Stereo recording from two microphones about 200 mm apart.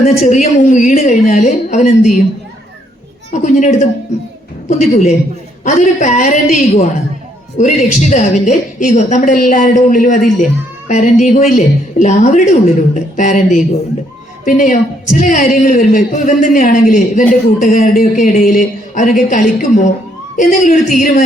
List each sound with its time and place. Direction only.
0.0 s speech: 35° left (ahead or behind)
3.3 s a woman's voice: 35° left (ahead or behind)